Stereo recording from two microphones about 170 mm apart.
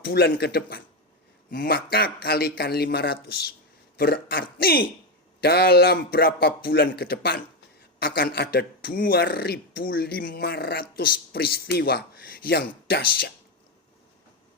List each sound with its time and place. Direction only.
0.0 s a man's voice: 65° left (ahead or behind)
1.5 s a man's voice: 60° left (ahead or behind)